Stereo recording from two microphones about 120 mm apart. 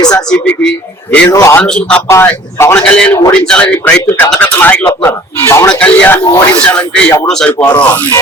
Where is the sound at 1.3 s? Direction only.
25° left (ahead or behind).